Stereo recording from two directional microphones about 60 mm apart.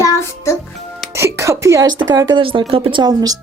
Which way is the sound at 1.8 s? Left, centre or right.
Right.